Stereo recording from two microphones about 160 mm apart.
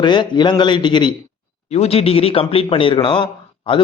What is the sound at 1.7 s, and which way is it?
A man's voice, 40° left (ahead or behind).